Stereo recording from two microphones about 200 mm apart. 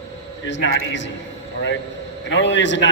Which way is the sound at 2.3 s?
65° left (ahead or behind).